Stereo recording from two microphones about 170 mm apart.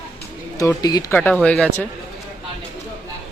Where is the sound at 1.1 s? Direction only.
10° left (ahead or behind).